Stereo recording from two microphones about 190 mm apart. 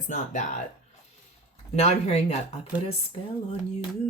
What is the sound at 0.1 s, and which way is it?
Speech, 40° left (ahead or behind).